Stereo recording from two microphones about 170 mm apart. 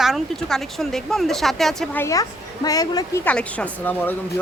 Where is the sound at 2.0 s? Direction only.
20° left (ahead or behind).